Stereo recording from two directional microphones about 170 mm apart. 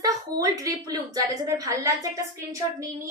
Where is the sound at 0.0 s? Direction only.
20° right (ahead or behind).